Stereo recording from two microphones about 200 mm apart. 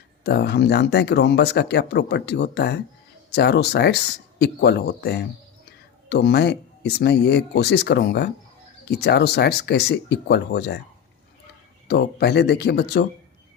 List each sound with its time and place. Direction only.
0.3 s speech: 55° left (ahead or behind)
11.9 s speech: 55° left (ahead or behind)